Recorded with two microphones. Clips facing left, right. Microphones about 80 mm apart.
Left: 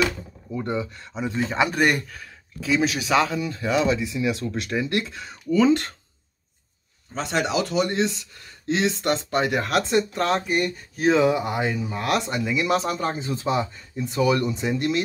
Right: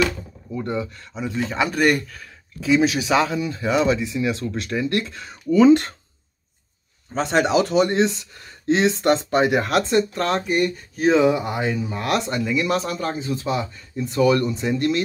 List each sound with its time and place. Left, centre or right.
0.6 s speech: left
2.6 s speech: centre
5.7 s speech: right
7.2 s speech: right
9.6 s speech: centre
9.8 s speech: centre